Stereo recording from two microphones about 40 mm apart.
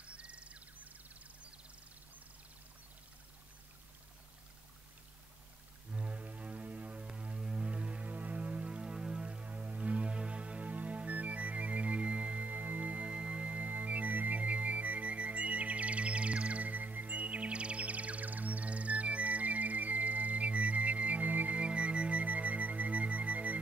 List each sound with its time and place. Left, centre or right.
0.0 s a sound: right
5.9 s music: right
8.6 s music: right
9.3 s music: right
13.1 s music: right
21.5 s music: right